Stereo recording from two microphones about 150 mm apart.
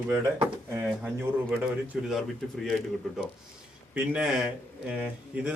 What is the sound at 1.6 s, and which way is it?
A man's voice, centre (ahead or behind).